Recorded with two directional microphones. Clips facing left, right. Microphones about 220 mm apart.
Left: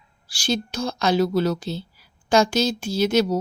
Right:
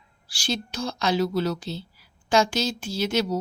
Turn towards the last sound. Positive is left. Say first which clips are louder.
# left 5 dB
turn(degrees=45)  # may be behind; listen again after turning